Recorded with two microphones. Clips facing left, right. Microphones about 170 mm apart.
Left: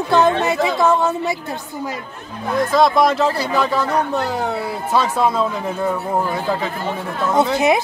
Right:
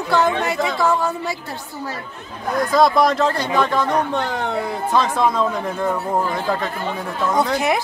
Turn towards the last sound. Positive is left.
turn(degrees=20)  # may be behind; listen again after turning